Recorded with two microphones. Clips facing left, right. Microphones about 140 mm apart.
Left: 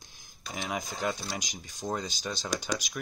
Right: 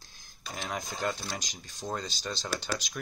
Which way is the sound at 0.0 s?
15° left (ahead or behind).